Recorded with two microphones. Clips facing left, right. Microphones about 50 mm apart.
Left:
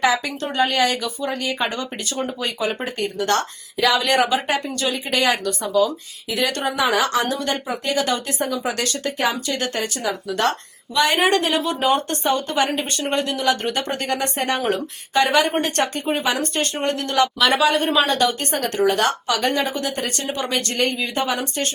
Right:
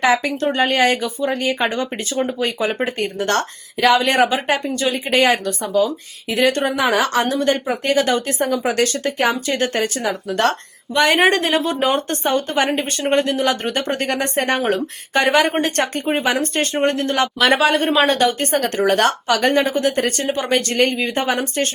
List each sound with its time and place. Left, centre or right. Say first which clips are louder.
0.0 s speech: right 4 dB; right